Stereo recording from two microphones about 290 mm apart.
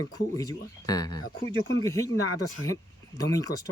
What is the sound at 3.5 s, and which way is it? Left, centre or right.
Speech, left.